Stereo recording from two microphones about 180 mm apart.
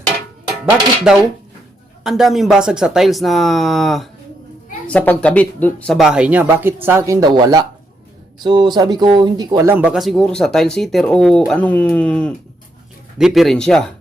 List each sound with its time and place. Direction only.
0.6 s speech: 5° right (ahead or behind); by 9.7 s 20° right (ahead or behind)
9.7 s speech: 5° right (ahead or behind)